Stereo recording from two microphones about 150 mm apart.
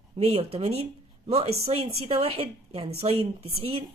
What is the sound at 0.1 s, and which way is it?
A woman's voice, 40° right (ahead or behind).